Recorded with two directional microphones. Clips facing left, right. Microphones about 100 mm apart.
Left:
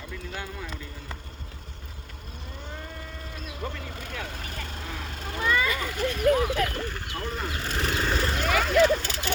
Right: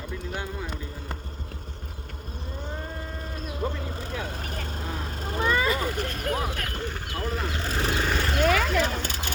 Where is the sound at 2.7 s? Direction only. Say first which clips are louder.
Right 3 dB; 35° right (ahead or behind).